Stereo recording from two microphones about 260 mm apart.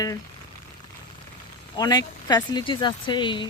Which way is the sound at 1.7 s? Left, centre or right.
Centre.